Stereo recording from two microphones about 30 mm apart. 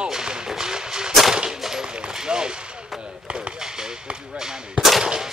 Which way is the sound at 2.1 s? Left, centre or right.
Right.